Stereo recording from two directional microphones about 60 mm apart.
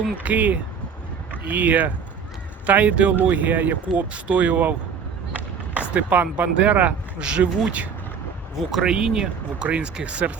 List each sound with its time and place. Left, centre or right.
0.2 s speech: right
5.9 s speech: right
8.5 s speech: centre